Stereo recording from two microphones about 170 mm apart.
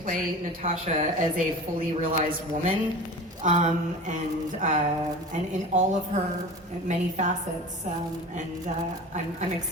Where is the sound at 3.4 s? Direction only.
45° right (ahead or behind).